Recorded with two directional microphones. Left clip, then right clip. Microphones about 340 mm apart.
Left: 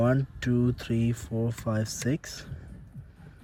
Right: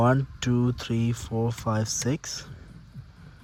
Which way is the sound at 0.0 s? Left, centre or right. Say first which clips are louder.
Right 3 dB; centre.